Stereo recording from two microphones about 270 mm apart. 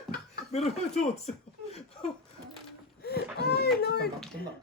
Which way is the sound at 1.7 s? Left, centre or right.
Left.